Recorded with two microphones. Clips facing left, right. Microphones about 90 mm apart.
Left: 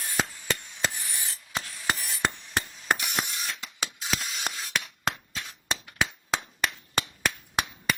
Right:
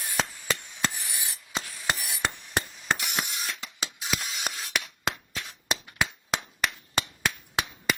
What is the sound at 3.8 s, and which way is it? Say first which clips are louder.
Mechanisms: left 1 dB; 15° right (ahead or behind).